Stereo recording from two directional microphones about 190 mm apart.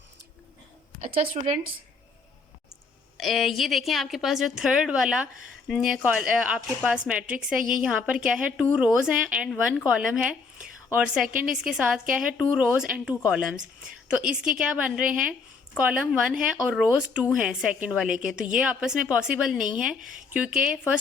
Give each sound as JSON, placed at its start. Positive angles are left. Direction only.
{"t": 1.1, "sound": "a woman's voice", "side_deg": -35}
{"t": 3.2, "sound": "a woman's voice", "side_deg": 0}